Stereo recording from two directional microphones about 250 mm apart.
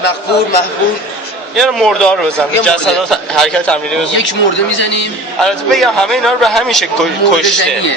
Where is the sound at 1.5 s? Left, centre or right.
Centre.